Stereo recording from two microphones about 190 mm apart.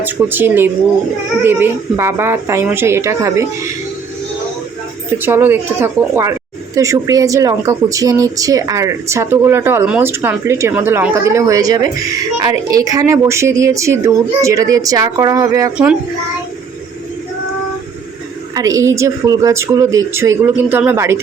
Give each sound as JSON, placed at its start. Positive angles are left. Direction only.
{"t": 0.0, "sound": "speech", "side_deg": -10}
{"t": 5.1, "sound": "speech", "side_deg": -10}
{"t": 18.5, "sound": "speech", "side_deg": -20}